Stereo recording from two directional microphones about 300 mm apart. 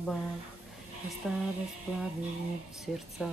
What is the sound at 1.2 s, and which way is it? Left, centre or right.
Speech, centre.